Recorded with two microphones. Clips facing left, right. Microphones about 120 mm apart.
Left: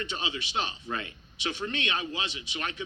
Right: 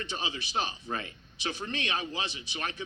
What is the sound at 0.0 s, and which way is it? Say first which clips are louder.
Speech: left 2 dB; 30° right (ahead or behind).